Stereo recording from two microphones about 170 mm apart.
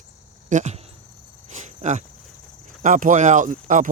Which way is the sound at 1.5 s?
45° right (ahead or behind).